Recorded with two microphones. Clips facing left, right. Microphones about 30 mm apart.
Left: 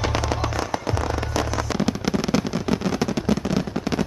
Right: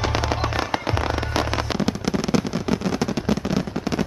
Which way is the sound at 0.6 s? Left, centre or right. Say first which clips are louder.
Right 2 dB; right.